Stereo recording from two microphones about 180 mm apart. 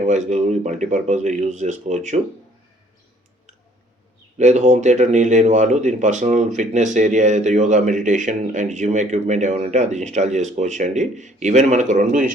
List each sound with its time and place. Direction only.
0.0 s speech: 40° right (ahead or behind)
4.4 s speech: 40° right (ahead or behind)